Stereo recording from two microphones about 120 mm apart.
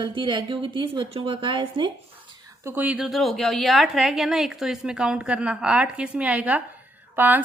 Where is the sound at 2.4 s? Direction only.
30° right (ahead or behind).